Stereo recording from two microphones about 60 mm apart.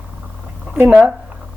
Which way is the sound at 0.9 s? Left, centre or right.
Centre.